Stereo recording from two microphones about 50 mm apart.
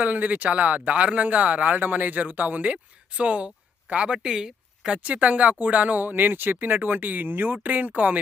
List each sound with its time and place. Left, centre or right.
0.0 s speech: right
4.2 s speech: centre
5.0 s speech: right